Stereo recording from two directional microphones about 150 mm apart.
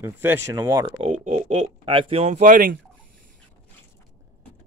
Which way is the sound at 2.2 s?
55° right (ahead or behind).